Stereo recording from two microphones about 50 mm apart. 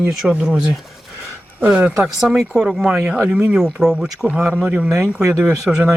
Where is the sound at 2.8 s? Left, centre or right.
Centre.